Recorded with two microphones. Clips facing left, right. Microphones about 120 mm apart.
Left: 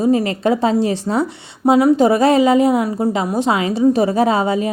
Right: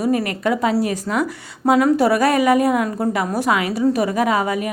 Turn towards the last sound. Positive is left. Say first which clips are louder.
# left 3 dB
turn(degrees=25)  # may be behind; listen again after turning